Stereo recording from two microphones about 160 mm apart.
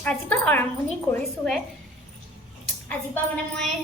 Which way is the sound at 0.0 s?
10° left (ahead or behind).